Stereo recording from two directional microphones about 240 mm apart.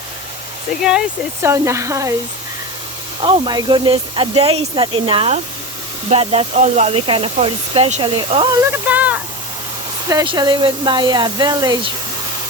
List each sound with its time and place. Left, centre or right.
0.8 s speech: centre
3.2 s speech: right
8.7 s speech: centre